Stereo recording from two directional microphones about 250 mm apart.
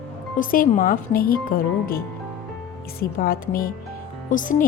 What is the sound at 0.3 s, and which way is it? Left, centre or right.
Speech, left.